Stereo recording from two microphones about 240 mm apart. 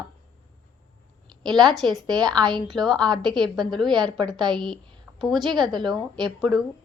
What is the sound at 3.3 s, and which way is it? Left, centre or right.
A woman's voice, centre.